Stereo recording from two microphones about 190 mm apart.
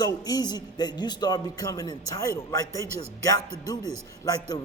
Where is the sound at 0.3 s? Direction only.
20° left (ahead or behind).